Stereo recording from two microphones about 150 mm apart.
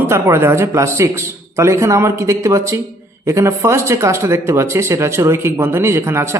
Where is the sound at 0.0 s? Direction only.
15° right (ahead or behind).